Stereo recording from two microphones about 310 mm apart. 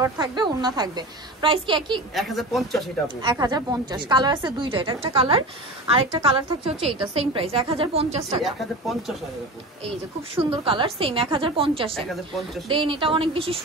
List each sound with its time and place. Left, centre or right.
0.0 s a woman's voice: centre
2.1 s a woman's voice: centre
3.2 s a woman's voice: centre
8.5 s a woman's voice: centre
10.3 s a woman's voice: centre